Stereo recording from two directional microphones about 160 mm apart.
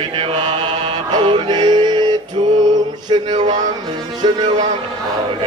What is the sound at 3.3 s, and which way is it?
Music, 50° right (ahead or behind).